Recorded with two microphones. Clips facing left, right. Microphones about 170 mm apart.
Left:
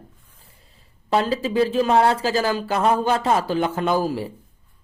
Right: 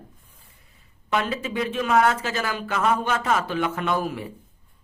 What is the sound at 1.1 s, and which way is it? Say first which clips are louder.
Speech: left 5 dB; 30° left (ahead or behind).